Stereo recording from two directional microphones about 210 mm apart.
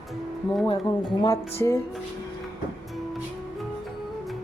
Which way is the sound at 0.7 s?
15° left (ahead or behind).